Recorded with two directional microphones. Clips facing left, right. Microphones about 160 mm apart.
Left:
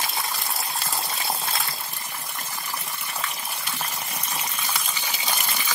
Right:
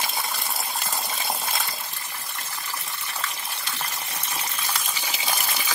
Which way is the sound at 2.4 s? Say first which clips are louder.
Left 1 dB; 15° left (ahead or behind).